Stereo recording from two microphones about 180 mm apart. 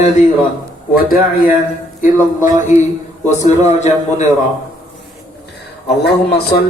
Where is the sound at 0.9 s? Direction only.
55° left (ahead or behind).